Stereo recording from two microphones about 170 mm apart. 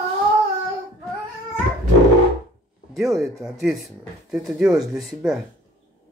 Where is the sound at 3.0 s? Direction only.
Centre (ahead or behind).